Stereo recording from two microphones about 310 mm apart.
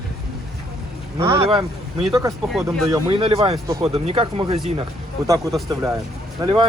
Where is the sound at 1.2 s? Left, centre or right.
Centre.